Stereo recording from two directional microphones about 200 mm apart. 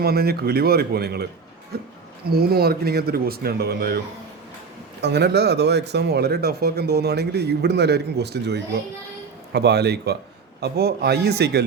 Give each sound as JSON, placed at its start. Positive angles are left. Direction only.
{"t": 0.0, "sound": "speech", "side_deg": -50}